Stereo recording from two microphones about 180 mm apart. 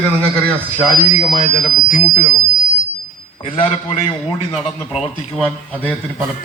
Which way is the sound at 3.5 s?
30° left (ahead or behind).